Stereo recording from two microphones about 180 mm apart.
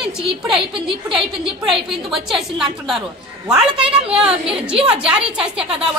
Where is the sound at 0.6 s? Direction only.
30° right (ahead or behind).